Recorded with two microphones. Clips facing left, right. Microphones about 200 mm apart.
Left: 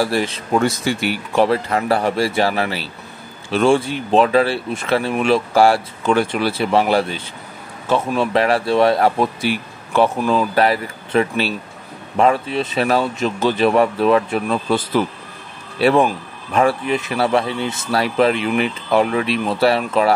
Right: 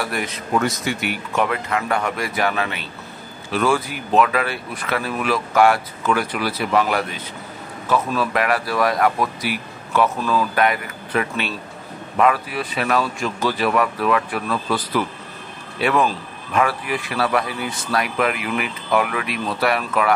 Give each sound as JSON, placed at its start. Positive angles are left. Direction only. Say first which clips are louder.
{"t": 0.0, "sound": "a man's voice", "louder": "left 6 dB", "side_deg": 30}
{"t": 10.1, "sound": "speech", "louder": "left 3 dB", "side_deg": 15}
{"t": 10.5, "sound": "a man's voice", "louder": "left 3 dB", "side_deg": 30}